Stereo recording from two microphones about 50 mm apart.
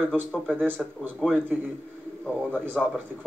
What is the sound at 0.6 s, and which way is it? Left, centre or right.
Speech, right.